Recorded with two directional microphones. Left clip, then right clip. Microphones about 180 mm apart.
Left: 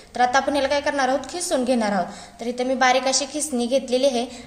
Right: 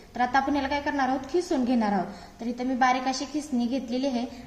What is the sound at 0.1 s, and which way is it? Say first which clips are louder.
A woman's voice: left 5 dB; 55° left (ahead or behind).